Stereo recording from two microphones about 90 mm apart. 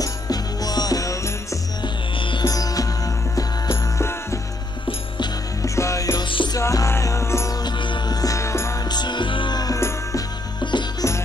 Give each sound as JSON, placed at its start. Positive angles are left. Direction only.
{"t": 0.0, "sound": "music", "side_deg": 45}
{"t": 2.4, "sound": "music", "side_deg": 45}
{"t": 5.6, "sound": "music", "side_deg": 35}
{"t": 6.1, "sound": "music", "side_deg": 60}
{"t": 6.6, "sound": "music", "side_deg": 35}
{"t": 7.6, "sound": "music", "side_deg": 60}
{"t": 8.2, "sound": "music", "side_deg": 35}
{"t": 8.8, "sound": "music", "side_deg": 55}
{"t": 9.8, "sound": "music", "side_deg": 30}
{"t": 10.6, "sound": "music", "side_deg": 60}